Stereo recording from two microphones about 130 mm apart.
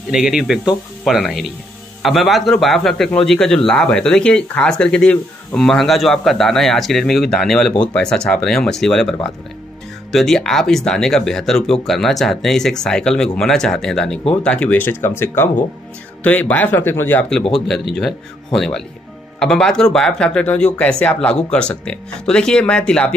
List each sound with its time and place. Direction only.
0.1 s a man's voice: 5° right (ahead or behind)